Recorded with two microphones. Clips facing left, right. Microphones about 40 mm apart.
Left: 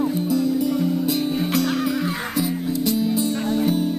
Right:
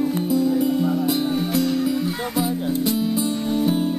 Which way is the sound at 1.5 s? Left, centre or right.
Left.